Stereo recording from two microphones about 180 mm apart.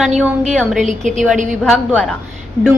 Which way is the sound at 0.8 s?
45° right (ahead or behind).